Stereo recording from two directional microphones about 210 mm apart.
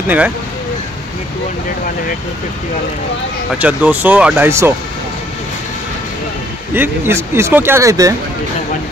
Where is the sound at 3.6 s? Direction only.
5° right (ahead or behind).